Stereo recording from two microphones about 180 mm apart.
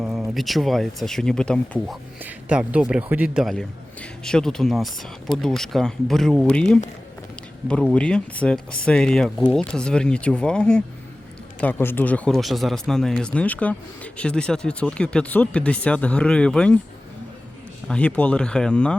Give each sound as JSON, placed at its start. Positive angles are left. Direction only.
{"t": 0.0, "sound": "a man's voice", "side_deg": 0}
{"t": 2.2, "sound": "a man's voice", "side_deg": -5}
{"t": 17.8, "sound": "a man's voice", "side_deg": 5}